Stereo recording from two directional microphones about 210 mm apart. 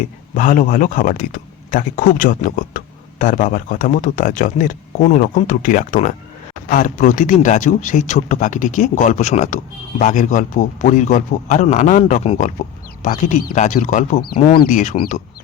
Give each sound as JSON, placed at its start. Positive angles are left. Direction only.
{"t": 0.3, "sound": "speech", "side_deg": 40}
{"t": 14.3, "sound": "speech", "side_deg": 25}
{"t": 14.6, "sound": "speech", "side_deg": 35}